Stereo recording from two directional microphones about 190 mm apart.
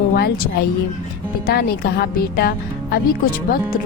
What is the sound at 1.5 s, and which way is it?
Speech, 55° left (ahead or behind).